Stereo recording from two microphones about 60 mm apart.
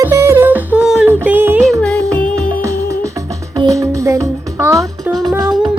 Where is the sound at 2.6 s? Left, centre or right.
Right.